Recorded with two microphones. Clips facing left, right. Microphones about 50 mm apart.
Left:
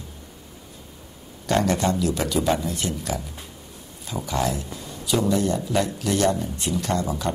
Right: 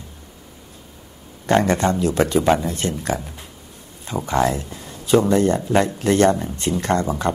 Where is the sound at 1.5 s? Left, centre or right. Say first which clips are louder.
Right 4 dB; right.